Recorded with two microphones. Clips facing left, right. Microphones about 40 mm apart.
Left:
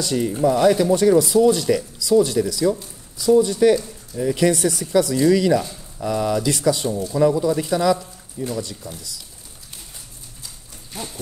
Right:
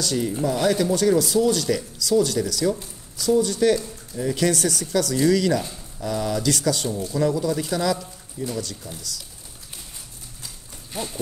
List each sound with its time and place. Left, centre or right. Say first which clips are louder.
0.2 s speech: left 7 dB; centre
3.7 s speech: left 3 dB; centre
4.4 s speech: left 3 dB; centre
8.5 s speech: left 2 dB; left
10.9 s speech: right 2 dB; centre